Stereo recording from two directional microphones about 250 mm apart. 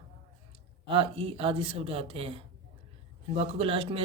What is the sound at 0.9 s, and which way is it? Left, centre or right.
Speech, right.